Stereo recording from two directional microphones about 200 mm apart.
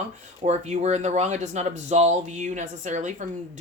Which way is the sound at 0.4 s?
35° right (ahead or behind).